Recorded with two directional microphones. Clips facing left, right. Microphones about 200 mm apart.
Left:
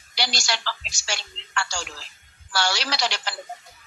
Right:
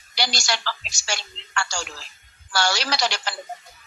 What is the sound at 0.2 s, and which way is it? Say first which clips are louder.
A woman's voice: right 2 dB; 45° right (ahead or behind).